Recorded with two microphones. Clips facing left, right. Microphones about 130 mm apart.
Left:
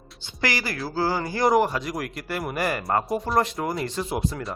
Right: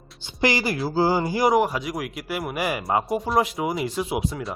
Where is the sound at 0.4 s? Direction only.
20° right (ahead or behind).